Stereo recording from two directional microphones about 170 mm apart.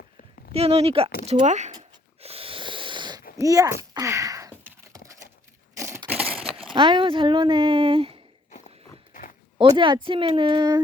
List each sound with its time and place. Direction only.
0.5 s speech: 35° right (ahead or behind)
2.2 s wheeze: 35° right (ahead or behind)
3.3 s a sound: 20° right (ahead or behind); by 6.7 s centre (ahead or behind)
6.7 s a woman's voice: 30° right (ahead or behind)
9.6 s a woman's voice: 30° right (ahead or behind)